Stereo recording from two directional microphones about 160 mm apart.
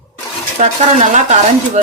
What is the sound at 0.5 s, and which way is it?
A woman's voice, 45° right (ahead or behind).